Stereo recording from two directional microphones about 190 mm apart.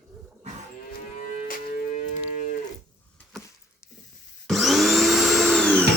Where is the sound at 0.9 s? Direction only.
45° left (ahead or behind).